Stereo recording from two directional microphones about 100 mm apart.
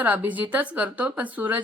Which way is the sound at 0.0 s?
15° right (ahead or behind).